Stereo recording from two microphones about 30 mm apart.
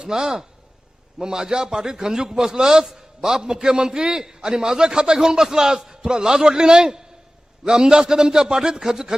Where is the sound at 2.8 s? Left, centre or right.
Centre.